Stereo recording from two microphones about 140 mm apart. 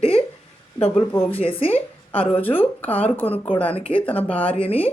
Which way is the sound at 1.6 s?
40° left (ahead or behind).